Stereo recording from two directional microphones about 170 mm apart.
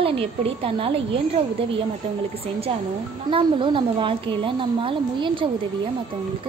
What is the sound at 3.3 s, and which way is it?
A woman's voice, 30° right (ahead or behind).